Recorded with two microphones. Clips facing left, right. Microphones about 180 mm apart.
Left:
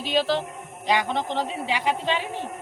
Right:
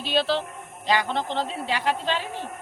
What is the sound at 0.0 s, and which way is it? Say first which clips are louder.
Speech: left 1 dB; 15° left (ahead or behind).